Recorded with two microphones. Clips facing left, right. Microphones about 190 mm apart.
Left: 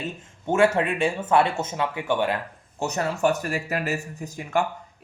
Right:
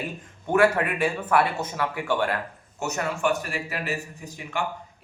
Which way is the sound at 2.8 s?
35° left (ahead or behind).